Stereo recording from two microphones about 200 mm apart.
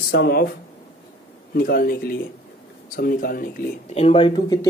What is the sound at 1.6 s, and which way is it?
Speech, 50° left (ahead or behind).